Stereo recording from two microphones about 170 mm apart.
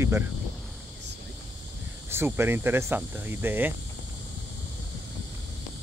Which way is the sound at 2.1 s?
15° right (ahead or behind).